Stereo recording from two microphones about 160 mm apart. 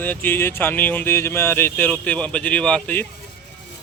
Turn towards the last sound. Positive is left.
turn(degrees=10)  # may be behind; listen again after turning